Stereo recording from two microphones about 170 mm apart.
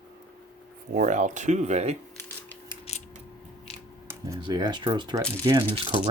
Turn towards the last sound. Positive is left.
turn(degrees=-30)  # may be behind; listen again after turning